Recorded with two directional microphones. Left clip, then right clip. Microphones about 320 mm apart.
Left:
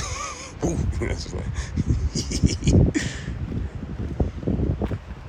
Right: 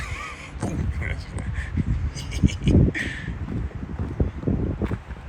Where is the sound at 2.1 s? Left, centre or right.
Left.